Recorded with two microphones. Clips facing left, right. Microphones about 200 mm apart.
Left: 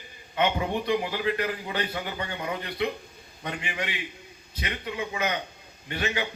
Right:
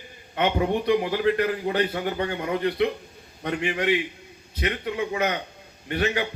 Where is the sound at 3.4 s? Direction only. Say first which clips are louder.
Right 9 dB; 50° right (ahead or behind).